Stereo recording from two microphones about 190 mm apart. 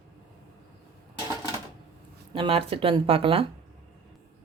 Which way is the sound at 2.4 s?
30° right (ahead or behind).